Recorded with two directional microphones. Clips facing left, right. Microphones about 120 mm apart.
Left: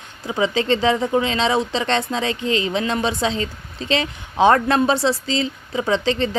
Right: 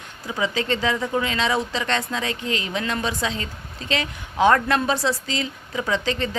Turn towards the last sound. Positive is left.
turn(degrees=30)  # may be behind; listen again after turning